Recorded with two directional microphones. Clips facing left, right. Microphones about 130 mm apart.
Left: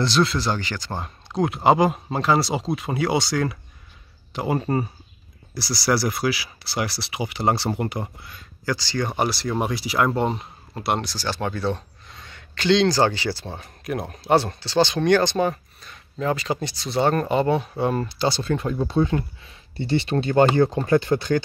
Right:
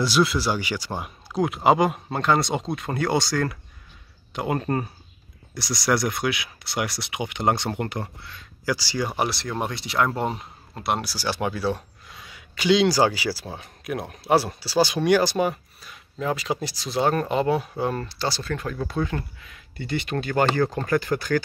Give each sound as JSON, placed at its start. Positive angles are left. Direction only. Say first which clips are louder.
{"t": 0.0, "sound": "speech", "louder": "even", "side_deg": -5}
{"t": 8.6, "sound": "speech", "louder": "left 1 dB", "side_deg": -10}
{"t": 18.2, "sound": "speech", "louder": "left 5 dB", "side_deg": 25}